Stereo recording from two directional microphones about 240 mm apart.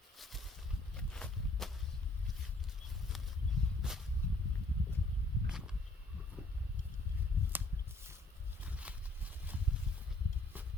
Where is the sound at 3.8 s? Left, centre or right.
Centre.